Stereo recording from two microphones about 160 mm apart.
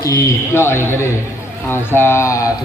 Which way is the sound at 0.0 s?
20° left (ahead or behind).